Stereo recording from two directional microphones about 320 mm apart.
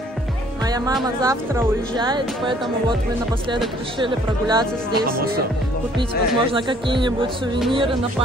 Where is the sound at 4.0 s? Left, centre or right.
Centre.